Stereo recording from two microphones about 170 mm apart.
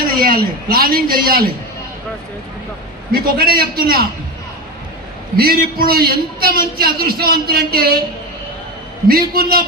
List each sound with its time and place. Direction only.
0.0 s a man's voice: 60° right (ahead or behind)
3.1 s a man's voice: 60° right (ahead or behind)
5.4 s a man's voice: 60° right (ahead or behind)
9.0 s a man's voice: 60° right (ahead or behind)